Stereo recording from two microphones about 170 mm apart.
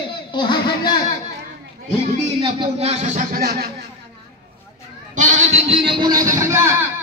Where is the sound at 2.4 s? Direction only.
35° right (ahead or behind); by 3.7 s 65° right (ahead or behind).